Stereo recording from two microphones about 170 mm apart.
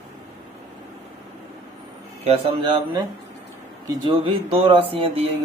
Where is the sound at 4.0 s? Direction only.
30° right (ahead or behind).